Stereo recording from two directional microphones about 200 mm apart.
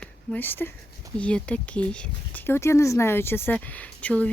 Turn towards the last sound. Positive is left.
turn(degrees=5)  # may be behind; listen again after turning